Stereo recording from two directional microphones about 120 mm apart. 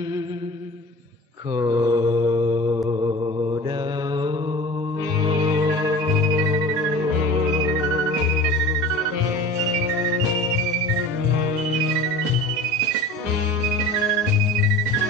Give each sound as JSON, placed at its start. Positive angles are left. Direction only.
{"t": 1.6, "sound": "mantra", "side_deg": -30}
{"t": 5.4, "sound": "music", "side_deg": -35}